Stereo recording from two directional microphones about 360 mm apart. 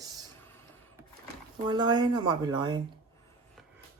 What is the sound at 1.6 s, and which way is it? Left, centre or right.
Speech, centre.